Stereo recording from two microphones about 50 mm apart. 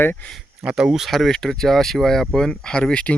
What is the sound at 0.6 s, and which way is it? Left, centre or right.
Speech, centre.